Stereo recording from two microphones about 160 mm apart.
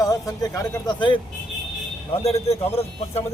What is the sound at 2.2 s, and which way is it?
Speech, 40° left (ahead or behind).